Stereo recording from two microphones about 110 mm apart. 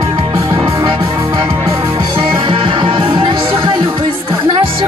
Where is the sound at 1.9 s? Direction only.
50° right (ahead or behind).